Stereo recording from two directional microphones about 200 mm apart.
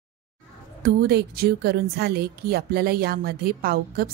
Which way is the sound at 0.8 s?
55° right (ahead or behind).